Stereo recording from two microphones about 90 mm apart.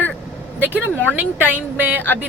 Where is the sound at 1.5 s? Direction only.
15° right (ahead or behind).